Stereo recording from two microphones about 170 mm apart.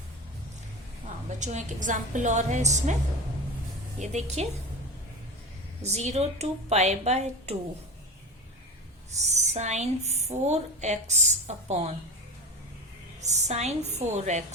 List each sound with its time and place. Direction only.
1.4 s a woman's voice: 45° right (ahead or behind)
4.0 s speech: 40° right (ahead or behind)
5.8 s speech: 40° right (ahead or behind)
9.1 s speech: 40° right (ahead or behind)
13.2 s speech: 40° right (ahead or behind)